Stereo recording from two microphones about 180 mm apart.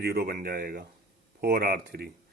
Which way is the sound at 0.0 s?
60° right (ahead or behind).